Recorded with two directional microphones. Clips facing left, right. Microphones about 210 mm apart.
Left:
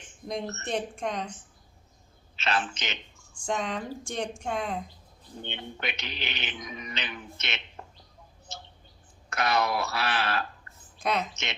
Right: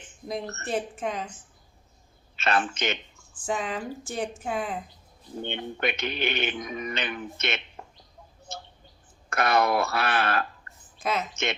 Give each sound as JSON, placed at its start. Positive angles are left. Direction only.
{"t": 0.6, "sound": "speech", "side_deg": -5}
{"t": 2.3, "sound": "a man's voice", "side_deg": -55}
{"t": 3.4, "sound": "speech", "side_deg": -5}
{"t": 5.4, "sound": "speech", "side_deg": -50}
{"t": 8.5, "sound": "a sound", "side_deg": -50}
{"t": 9.3, "sound": "speech", "side_deg": -50}
{"t": 10.9, "sound": "a woman's voice", "side_deg": 0}